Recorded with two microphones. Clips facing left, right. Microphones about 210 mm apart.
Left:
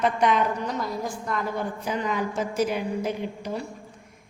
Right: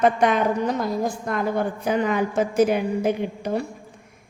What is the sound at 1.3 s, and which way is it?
A woman's voice, 55° right (ahead or behind).